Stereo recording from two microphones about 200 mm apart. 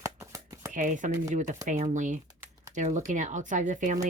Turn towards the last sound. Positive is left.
turn(degrees=-40)  # may be behind; listen again after turning